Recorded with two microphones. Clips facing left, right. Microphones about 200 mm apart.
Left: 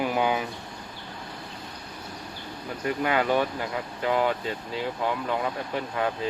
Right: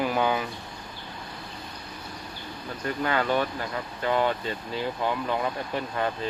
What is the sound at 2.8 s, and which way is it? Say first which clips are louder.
Speech: left 2 dB; 15° left (ahead or behind).